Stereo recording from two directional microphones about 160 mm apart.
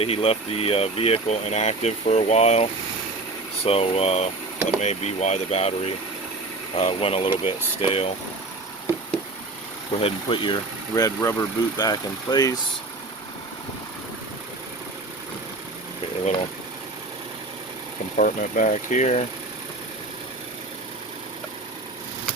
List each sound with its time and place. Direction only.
0.0 s speech: 40° left (ahead or behind)
10.0 s speech: 35° left (ahead or behind)
18.2 s speech: 55° left (ahead or behind)